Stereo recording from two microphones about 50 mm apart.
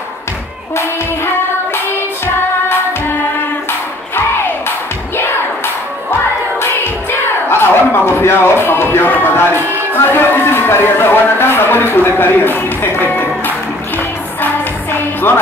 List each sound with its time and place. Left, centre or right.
0.7 s music: left
4.6 s music: left
6.6 s music: left
9.6 s music: right
9.9 s a sound: left
15.0 s music: left